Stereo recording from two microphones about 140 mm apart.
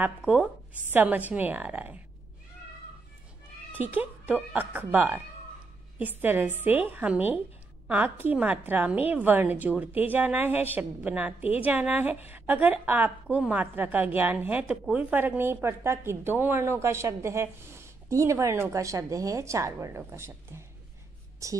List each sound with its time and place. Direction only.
0.0 s a woman's voice: 5° right (ahead or behind)
3.7 s a woman's voice: 15° right (ahead or behind)